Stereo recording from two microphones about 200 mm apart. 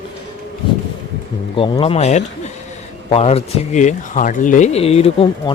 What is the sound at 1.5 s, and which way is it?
Speech, 30° left (ahead or behind).